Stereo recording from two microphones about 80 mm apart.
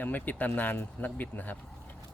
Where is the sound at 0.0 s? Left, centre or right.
Left.